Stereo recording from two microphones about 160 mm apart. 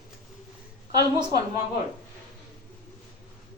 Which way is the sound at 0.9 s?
25° right (ahead or behind).